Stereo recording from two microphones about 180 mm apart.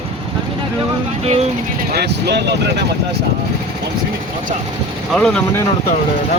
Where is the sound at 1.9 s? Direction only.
65° right (ahead or behind).